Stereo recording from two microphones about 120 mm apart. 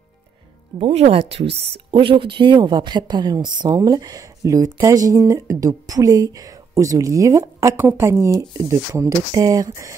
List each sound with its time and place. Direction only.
0.7 s speech: 55° right (ahead or behind); by 9.9 s 30° right (ahead or behind)